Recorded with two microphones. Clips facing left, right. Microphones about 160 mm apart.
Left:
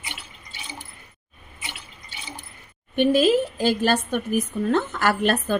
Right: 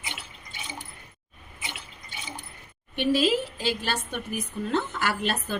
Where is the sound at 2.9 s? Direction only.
50° left (ahead or behind).